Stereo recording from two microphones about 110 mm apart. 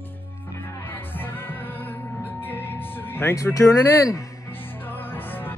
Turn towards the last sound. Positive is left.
turn(degrees=20)  # may be behind; listen again after turning